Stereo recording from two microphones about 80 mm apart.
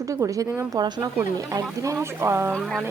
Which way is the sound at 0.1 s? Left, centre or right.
Right.